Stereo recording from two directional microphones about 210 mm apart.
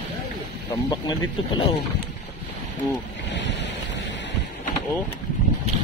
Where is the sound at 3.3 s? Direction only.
55° left (ahead or behind).